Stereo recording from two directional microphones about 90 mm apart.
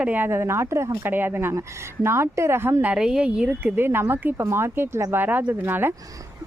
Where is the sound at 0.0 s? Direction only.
20° right (ahead or behind).